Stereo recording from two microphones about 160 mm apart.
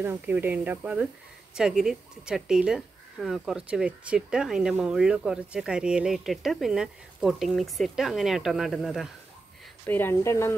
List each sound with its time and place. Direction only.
0.0 s speech: 10° right (ahead or behind)
9.8 s speech: 15° left (ahead or behind)